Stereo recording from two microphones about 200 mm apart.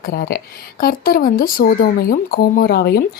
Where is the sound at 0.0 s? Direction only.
50° left (ahead or behind).